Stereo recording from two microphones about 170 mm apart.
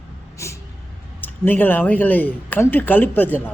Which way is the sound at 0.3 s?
15° left (ahead or behind).